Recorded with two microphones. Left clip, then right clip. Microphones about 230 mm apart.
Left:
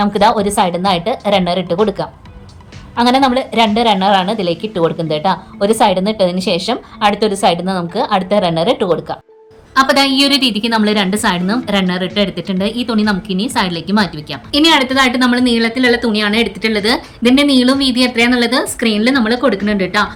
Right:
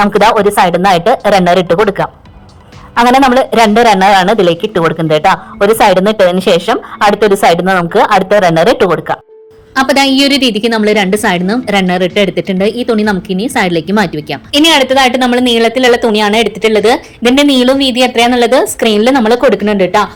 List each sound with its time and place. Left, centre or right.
0.0 s speech: right
9.7 s a woman's voice: centre